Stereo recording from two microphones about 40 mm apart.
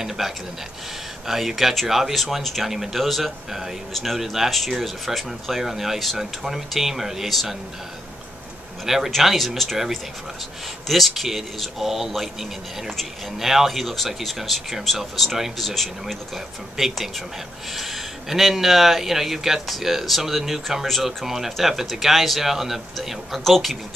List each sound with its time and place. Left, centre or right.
0.2 s speech: centre
7.2 s speech: centre
8.8 s speech: centre
10.9 s speech: centre
16.7 s speech: centre